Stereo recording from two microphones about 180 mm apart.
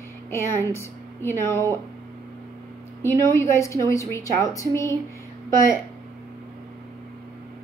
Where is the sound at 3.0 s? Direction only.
15° left (ahead or behind).